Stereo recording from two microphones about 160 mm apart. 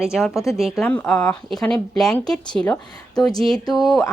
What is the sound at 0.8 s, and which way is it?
Speech, 10° left (ahead or behind).